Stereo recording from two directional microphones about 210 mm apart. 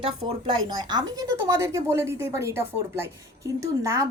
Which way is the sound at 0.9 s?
20° right (ahead or behind).